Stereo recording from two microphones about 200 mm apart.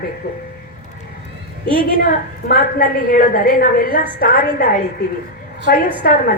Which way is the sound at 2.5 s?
45° left (ahead or behind).